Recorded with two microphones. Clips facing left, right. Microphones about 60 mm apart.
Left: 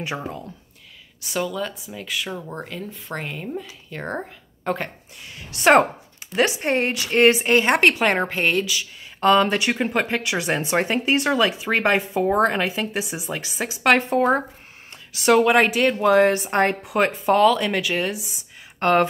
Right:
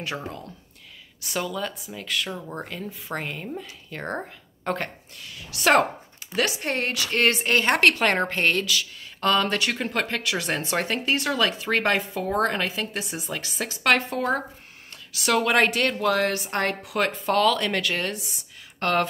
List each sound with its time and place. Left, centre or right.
0.0 s a woman's voice: centre
1.2 s speech: centre
5.2 s a woman's voice: left
14.0 s a woman's voice: left; by 18.2 s centre
18.8 s speech: left